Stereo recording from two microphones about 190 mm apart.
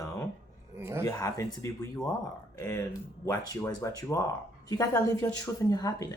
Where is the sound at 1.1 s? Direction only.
15° left (ahead or behind).